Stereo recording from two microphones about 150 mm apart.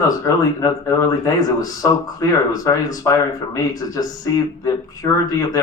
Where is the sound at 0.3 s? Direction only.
20° left (ahead or behind).